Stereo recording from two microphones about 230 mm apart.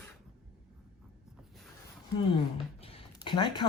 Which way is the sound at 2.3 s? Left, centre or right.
Left.